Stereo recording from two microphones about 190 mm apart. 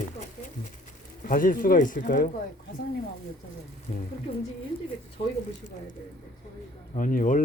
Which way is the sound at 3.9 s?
45° left (ahead or behind).